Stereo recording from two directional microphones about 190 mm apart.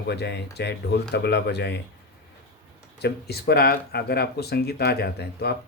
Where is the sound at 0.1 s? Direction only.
60° left (ahead or behind).